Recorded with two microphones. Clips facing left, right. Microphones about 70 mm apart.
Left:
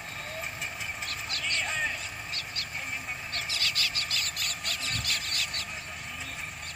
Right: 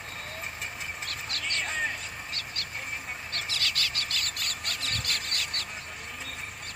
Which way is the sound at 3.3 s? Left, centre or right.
Right.